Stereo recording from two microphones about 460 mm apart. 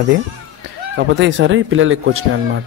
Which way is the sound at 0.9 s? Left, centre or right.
Right.